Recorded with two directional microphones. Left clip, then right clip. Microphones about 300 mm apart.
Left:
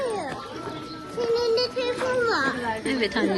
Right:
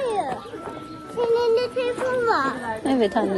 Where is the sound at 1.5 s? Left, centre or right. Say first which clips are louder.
Right 2 dB; right; by 3.2 s centre.